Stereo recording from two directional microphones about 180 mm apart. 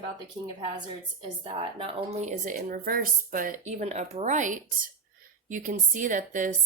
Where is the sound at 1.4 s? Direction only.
30° right (ahead or behind).